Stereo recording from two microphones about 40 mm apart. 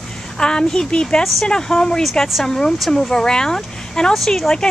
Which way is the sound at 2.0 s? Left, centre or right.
Centre.